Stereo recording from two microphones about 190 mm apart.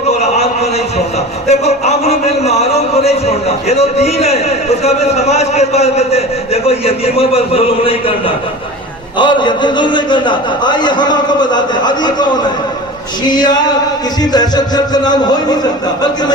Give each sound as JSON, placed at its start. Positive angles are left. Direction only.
{"t": 0.2, "sound": "a sound", "side_deg": 35}
{"t": 1.5, "sound": "speech", "side_deg": 35}
{"t": 9.1, "sound": "speech", "side_deg": 25}
{"t": 13.2, "sound": "speech", "side_deg": 20}